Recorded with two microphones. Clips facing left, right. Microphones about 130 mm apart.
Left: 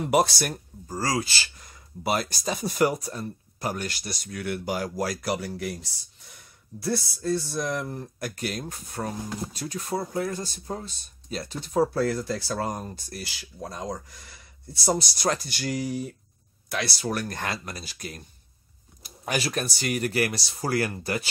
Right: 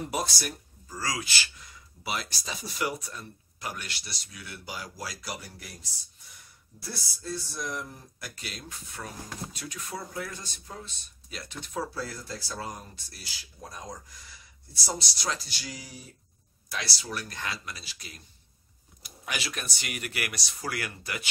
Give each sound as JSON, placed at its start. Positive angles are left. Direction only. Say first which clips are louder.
{"t": 0.0, "sound": "speech", "louder": "left 9 dB", "side_deg": 65}
{"t": 0.8, "sound": "speech", "louder": "left 7 dB", "side_deg": 40}
{"t": 6.8, "sound": "speech", "louder": "left 12 dB", "side_deg": 60}
{"t": 11.9, "sound": "speech", "louder": "left 11 dB", "side_deg": 65}
{"t": 13.2, "sound": "speech", "louder": "left 5 dB", "side_deg": 65}